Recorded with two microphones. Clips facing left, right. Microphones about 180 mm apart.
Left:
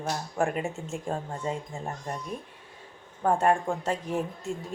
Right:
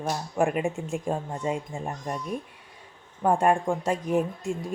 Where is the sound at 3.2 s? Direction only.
15° right (ahead or behind).